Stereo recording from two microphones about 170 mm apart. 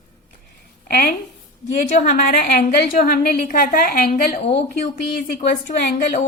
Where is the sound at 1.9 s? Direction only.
50° left (ahead or behind).